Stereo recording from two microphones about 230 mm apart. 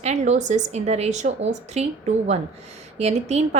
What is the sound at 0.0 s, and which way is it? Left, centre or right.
A woman's voice, right.